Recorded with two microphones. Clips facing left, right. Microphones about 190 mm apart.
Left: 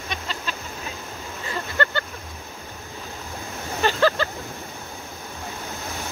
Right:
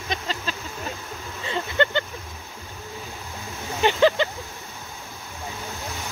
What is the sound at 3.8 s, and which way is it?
Vehicle, 20° right (ahead or behind).